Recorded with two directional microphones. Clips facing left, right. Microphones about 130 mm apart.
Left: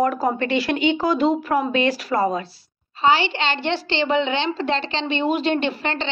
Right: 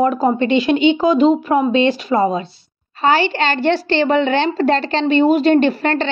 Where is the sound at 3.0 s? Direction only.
45° right (ahead or behind).